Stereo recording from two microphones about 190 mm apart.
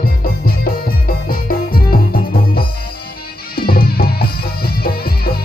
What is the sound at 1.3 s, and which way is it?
Music, 50° left (ahead or behind).